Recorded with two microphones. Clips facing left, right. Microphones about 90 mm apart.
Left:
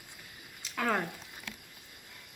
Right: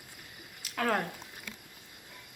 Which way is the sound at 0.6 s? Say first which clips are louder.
Right 1 dB; centre (ahead or behind).